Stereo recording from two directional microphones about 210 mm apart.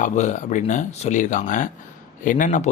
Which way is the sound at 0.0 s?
35° left (ahead or behind).